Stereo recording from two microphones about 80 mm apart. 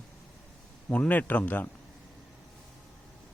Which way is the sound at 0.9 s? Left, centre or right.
Left.